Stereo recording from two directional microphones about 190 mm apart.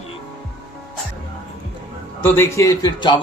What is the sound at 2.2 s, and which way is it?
Speech, 15° left (ahead or behind).